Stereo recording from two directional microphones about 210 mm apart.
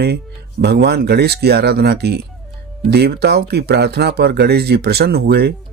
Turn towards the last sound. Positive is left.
turn(degrees=-50)  # may be behind; listen again after turning